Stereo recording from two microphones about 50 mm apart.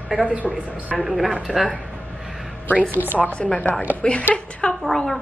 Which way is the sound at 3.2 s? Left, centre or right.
Left.